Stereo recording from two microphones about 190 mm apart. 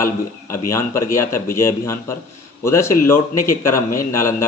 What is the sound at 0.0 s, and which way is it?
Speech, 15° left (ahead or behind).